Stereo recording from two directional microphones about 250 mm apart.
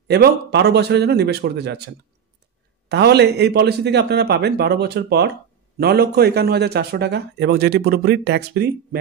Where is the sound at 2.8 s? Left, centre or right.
Right.